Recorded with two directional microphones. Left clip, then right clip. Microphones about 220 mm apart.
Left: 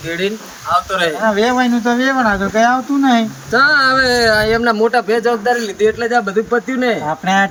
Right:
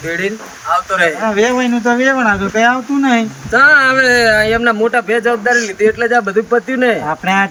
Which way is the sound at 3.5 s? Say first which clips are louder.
Right 3 dB; 15° right (ahead or behind).